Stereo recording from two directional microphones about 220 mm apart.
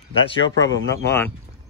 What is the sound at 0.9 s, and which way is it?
Speech, 10° left (ahead or behind).